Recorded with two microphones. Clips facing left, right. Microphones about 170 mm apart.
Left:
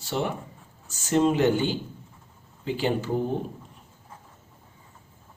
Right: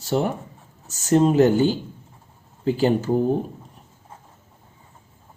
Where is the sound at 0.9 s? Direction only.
40° right (ahead or behind).